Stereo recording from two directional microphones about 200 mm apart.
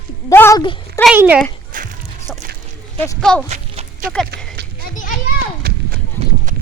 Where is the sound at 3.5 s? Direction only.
35° right (ahead or behind).